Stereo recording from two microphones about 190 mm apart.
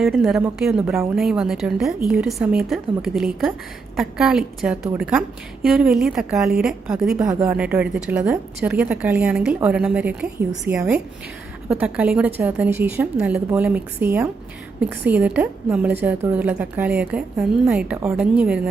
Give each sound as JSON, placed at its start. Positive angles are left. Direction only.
{"t": 0.0, "sound": "a woman's voice", "side_deg": 0}
{"t": 7.2, "sound": "a woman's voice", "side_deg": -15}